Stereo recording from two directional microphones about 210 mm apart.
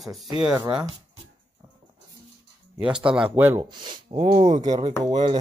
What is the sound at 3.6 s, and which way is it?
Speech, 20° right (ahead or behind).